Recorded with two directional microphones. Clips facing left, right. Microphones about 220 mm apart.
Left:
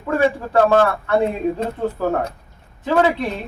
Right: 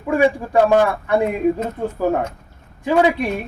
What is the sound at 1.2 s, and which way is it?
Speech, 30° left (ahead or behind).